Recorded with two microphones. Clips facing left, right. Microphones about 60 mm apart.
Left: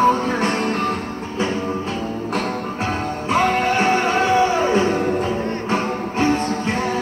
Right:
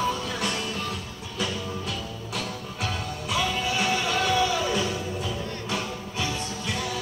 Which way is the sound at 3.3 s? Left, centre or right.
Left.